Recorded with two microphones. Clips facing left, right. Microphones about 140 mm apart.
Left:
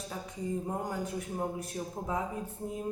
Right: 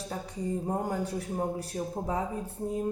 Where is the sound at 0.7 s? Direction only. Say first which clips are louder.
Right 4 dB; 35° right (ahead or behind).